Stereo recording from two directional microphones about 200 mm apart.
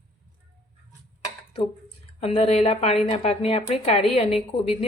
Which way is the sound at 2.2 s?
30° left (ahead or behind).